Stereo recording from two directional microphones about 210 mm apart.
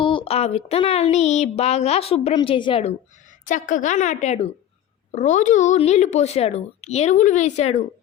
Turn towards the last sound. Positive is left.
turn(degrees=30)  # may be behind; listen again after turning